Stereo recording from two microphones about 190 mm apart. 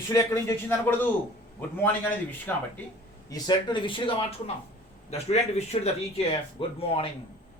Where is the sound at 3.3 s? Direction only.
20° left (ahead or behind).